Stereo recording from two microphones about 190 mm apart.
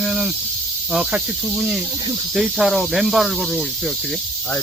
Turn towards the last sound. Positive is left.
turn(degrees=0)  # may be behind; listen again after turning